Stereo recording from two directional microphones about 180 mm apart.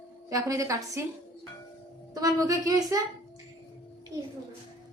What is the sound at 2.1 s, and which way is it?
Speech, 20° right (ahead or behind).